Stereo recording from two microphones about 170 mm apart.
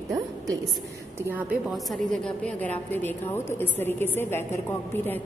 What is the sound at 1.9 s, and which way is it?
A woman's voice, 5° left (ahead or behind).